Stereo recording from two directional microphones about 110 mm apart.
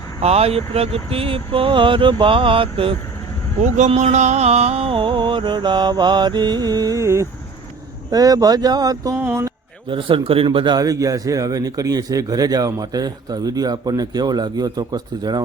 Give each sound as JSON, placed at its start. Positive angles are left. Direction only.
{"t": 0.2, "sound": "speech", "side_deg": -70}
{"t": 3.6, "sound": "a sound", "side_deg": -85}
{"t": 8.1, "sound": "speech", "side_deg": -35}
{"t": 9.1, "sound": "speech", "side_deg": -20}
{"t": 9.9, "sound": "speech", "side_deg": -50}